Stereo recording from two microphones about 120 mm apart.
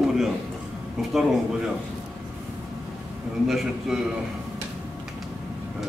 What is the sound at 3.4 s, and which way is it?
Speech, centre (ahead or behind).